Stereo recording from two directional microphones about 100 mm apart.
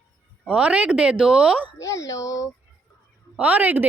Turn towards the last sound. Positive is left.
turn(degrees=-15)  # may be behind; listen again after turning